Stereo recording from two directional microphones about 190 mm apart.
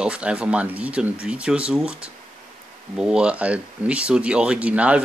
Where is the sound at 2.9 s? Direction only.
5° right (ahead or behind).